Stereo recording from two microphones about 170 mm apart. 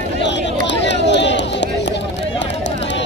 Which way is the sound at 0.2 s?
90° left.